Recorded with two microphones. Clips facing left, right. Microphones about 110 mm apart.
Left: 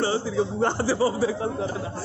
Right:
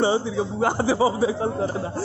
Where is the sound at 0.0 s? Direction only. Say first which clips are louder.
Right 2 dB; 20° right (ahead or behind).